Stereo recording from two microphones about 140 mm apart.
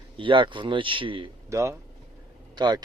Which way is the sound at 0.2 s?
35° right (ahead or behind).